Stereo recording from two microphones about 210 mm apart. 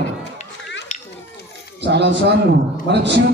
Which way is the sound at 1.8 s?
55° right (ahead or behind).